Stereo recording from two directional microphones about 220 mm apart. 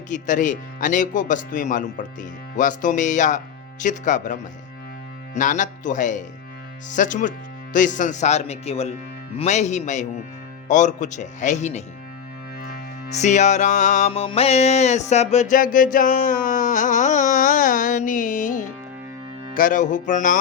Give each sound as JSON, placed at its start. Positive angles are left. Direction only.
{"t": 0.1, "sound": "speech", "side_deg": 35}
{"t": 12.6, "sound": "music", "side_deg": 30}
{"t": 19.5, "sound": "speech", "side_deg": 35}